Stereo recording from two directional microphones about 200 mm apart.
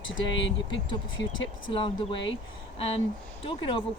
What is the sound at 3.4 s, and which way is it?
Speech, 25° left (ahead or behind).